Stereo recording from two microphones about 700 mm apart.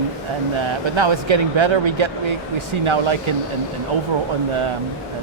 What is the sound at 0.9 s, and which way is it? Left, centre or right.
Speech, right.